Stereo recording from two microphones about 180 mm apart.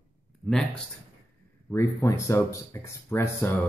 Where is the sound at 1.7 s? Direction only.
15° left (ahead or behind).